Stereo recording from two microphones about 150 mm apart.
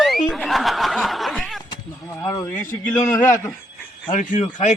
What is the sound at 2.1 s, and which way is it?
Speech, 20° left (ahead or behind).